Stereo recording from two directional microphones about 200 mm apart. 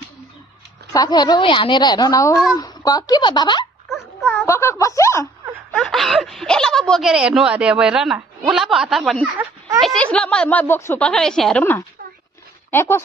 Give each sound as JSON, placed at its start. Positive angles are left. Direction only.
{"t": 0.9, "sound": "a woman's voice", "side_deg": 20}
{"t": 3.9, "sound": "a sound", "side_deg": 0}
{"t": 4.5, "sound": "speech", "side_deg": 15}
{"t": 5.7, "sound": "a woman's voice", "side_deg": 0}